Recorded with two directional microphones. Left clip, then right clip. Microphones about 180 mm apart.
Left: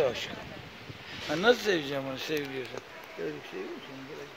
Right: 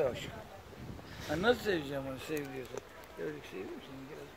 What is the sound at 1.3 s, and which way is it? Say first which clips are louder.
Speech: left 6 dB; 40° left (ahead or behind).